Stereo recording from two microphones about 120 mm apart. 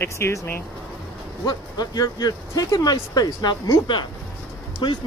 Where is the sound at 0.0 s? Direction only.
25° left (ahead or behind).